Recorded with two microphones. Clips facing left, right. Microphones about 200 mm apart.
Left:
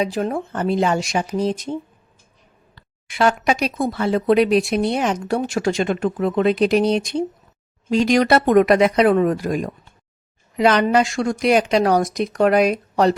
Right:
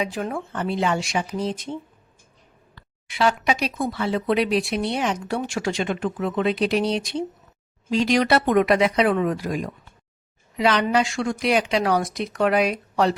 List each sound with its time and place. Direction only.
0.0 s speech: 35° left (ahead or behind)
3.1 s speech: 50° left (ahead or behind)